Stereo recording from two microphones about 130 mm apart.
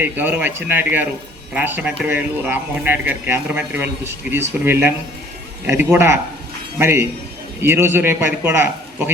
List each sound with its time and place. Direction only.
0.0 s a man's voice: 15° right (ahead or behind)